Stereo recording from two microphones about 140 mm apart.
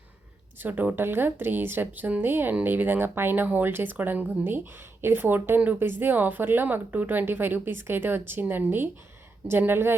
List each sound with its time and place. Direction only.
0.6 s a woman's voice: 10° right (ahead or behind)